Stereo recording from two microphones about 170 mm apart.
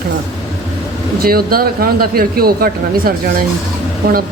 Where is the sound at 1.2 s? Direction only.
60° right (ahead or behind).